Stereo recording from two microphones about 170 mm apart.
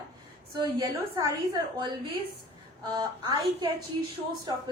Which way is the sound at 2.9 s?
25° right (ahead or behind).